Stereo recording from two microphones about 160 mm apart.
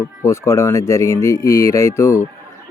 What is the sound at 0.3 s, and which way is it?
Speech, 15° left (ahead or behind).